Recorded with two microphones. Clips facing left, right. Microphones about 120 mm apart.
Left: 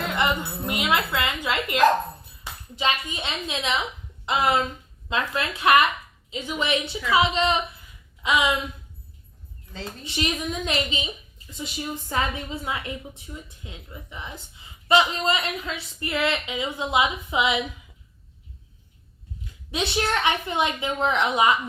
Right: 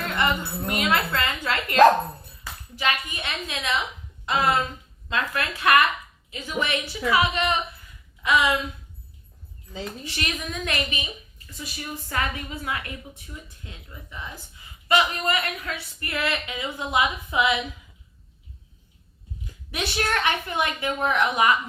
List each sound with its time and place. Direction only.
0.0 s a woman's voice: 20° left (ahead or behind)
10.0 s a woman's voice: 20° left (ahead or behind)
19.7 s a woman's voice: 20° left (ahead or behind)